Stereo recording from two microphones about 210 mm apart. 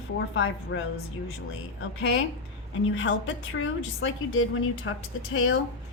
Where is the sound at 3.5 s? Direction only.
70° left (ahead or behind).